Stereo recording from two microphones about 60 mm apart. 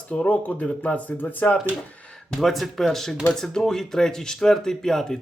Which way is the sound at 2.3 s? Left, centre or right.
Centre.